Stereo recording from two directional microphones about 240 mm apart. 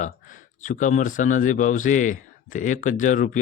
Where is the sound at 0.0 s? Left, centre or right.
Left.